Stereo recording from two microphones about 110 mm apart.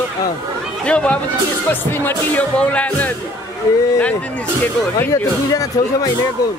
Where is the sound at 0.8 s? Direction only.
10° left (ahead or behind).